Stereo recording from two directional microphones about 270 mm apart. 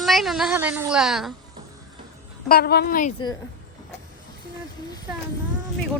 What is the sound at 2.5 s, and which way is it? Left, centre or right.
Speech, left.